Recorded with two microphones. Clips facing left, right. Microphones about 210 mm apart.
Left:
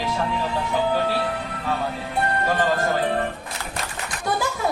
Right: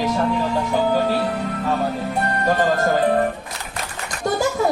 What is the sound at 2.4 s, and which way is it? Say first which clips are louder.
Speech: right 5 dB; 45° right (ahead or behind).